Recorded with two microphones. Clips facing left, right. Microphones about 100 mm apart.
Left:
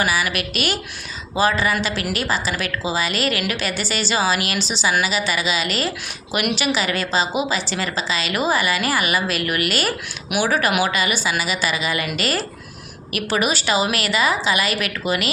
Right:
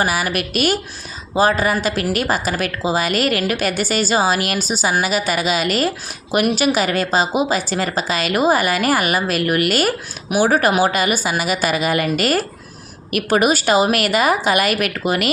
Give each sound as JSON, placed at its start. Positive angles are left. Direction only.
{"t": 0.0, "sound": "a woman's voice", "side_deg": -45}